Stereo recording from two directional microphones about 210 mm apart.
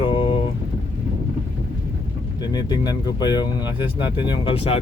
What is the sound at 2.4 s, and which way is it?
Speech, 20° left (ahead or behind).